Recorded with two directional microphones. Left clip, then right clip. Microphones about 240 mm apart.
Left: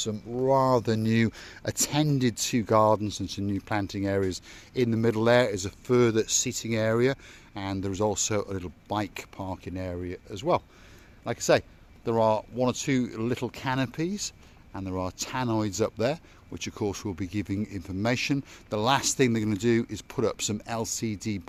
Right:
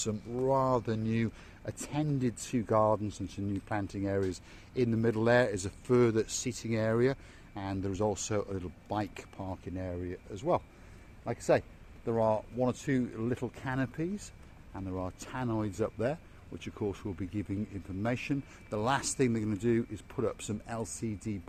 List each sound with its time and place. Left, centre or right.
0.0 s speech: left